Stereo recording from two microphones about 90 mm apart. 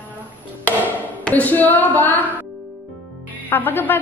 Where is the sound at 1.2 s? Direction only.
15° left (ahead or behind).